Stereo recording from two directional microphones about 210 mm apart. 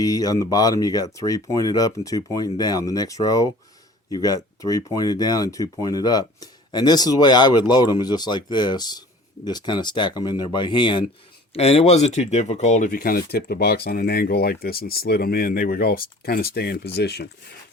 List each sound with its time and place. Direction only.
0.0 s speech: 15° left (ahead or behind); by 17.2 s 50° left (ahead or behind)